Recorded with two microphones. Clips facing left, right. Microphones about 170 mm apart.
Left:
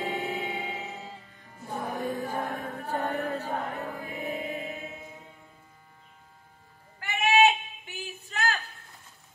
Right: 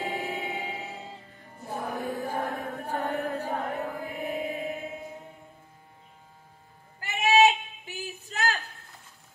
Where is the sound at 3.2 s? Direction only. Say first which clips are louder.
Right 1 dB; 10° right (ahead or behind).